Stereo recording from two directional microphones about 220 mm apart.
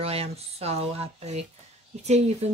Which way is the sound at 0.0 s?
25° right (ahead or behind).